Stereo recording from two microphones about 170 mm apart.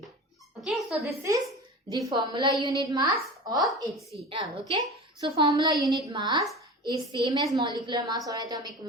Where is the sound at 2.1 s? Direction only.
25° right (ahead or behind).